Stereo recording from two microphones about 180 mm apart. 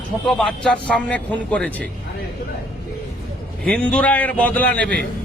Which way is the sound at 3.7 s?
5° left (ahead or behind).